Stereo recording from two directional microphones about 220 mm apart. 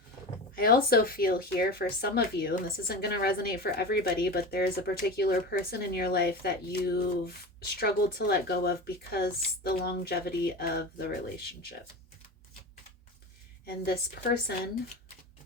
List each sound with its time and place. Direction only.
0.5 s speech: 40° left (ahead or behind)
13.7 s speech: 45° left (ahead or behind)